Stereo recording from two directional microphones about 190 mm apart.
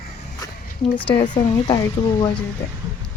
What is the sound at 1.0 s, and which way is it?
Speech, 25° left (ahead or behind).